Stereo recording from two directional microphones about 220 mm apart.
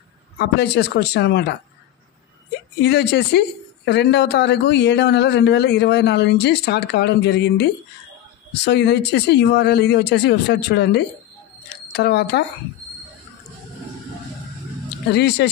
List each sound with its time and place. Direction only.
0.4 s speech: 50° left (ahead or behind)
2.8 s speech: 50° left (ahead or behind)
15.0 s speech: 50° left (ahead or behind)